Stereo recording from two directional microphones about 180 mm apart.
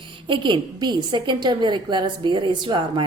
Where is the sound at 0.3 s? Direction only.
25° right (ahead or behind).